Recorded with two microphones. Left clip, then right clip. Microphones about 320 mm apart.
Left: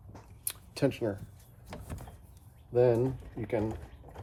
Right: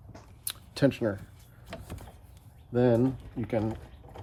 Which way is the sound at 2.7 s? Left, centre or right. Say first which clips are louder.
Even; right.